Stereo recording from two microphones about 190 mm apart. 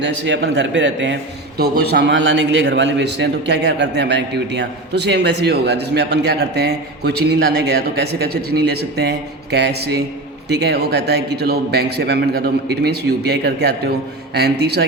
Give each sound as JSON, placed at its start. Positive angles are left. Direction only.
{"t": 0.0, "sound": "a man's voice", "side_deg": -70}
{"t": 1.5, "sound": "a man's voice", "side_deg": -55}